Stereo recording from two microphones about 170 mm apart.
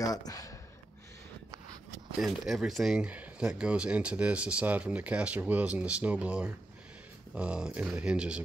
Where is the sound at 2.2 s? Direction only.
Centre (ahead or behind).